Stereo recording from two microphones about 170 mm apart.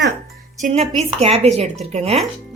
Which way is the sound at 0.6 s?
45° right (ahead or behind).